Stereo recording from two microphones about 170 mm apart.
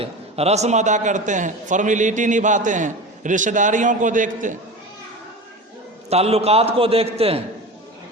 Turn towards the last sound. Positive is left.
turn(degrees=-35)  # may be behind; listen again after turning